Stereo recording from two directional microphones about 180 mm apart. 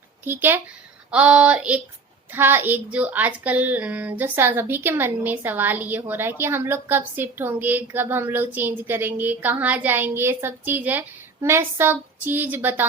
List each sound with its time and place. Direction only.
0.3 s a woman's voice: 10° right (ahead or behind)